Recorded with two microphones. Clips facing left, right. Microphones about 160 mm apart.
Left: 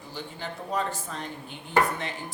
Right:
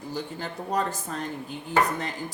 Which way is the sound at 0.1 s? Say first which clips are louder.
Right 3 dB; 40° right (ahead or behind).